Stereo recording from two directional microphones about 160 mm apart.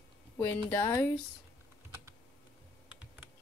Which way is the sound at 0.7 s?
15° left (ahead or behind).